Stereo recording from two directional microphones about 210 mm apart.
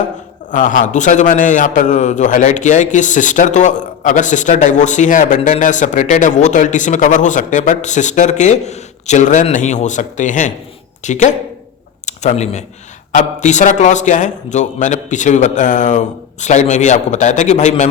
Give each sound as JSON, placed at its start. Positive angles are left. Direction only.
{"t": 0.5, "sound": "a man's voice", "side_deg": 40}